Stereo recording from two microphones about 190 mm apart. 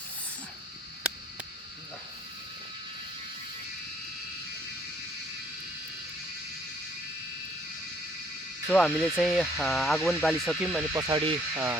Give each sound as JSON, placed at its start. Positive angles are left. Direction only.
{"t": 8.6, "sound": "speech", "side_deg": 5}
{"t": 11.0, "sound": "speech", "side_deg": -25}
{"t": 11.5, "sound": "speech", "side_deg": -10}